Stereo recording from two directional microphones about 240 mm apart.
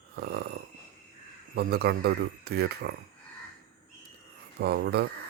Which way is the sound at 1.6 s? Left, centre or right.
Right.